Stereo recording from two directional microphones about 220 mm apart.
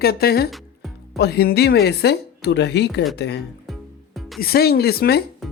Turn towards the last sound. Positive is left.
turn(degrees=0)  # may be behind; listen again after turning